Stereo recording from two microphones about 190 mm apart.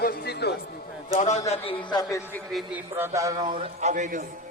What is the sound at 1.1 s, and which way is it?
Speech, 35° left (ahead or behind).